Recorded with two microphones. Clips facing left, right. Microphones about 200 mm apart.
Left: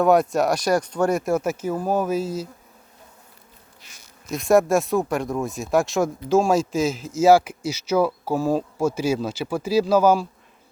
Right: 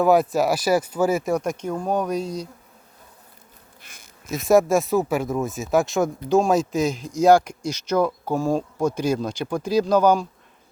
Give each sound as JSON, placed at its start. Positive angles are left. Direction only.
{"t": 0.0, "sound": "speech", "side_deg": 0}
{"t": 3.8, "sound": "insect", "side_deg": -55}
{"t": 4.3, "sound": "speech", "side_deg": 0}